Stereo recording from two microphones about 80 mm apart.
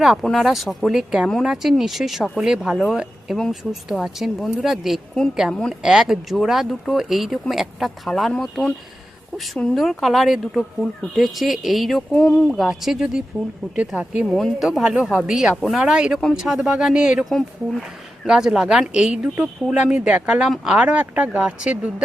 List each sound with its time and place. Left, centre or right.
0.0 s speech: centre
10.0 s speech: centre
12.1 s speech: centre
12.5 s speech: centre
14.3 s speech: centre
14.8 s speech: centre
17.2 s speech: centre